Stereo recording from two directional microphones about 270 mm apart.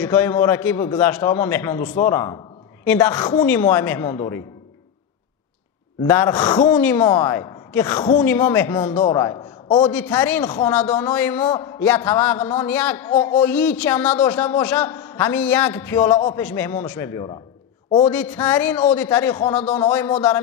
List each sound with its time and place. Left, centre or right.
0.0 s a man's voice: centre
6.0 s a man's voice: centre